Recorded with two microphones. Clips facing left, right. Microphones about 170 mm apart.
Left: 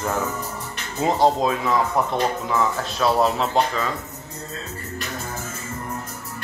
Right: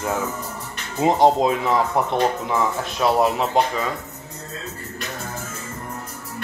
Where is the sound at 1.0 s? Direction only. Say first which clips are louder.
Right 3 dB; 20° right (ahead or behind).